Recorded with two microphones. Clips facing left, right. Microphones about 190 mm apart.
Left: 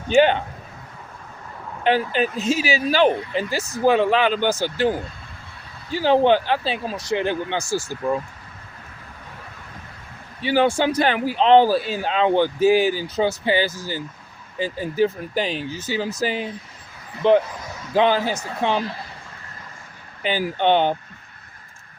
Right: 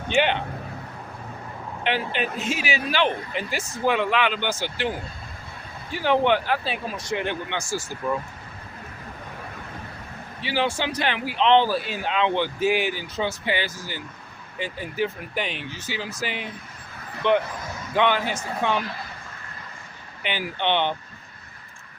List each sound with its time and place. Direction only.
0.1 s speech: 40° left (ahead or behind)
1.8 s speech: 40° left (ahead or behind)
10.4 s speech: 50° left (ahead or behind); by 18.9 s 30° left (ahead or behind)
20.2 s speech: 40° left (ahead or behind)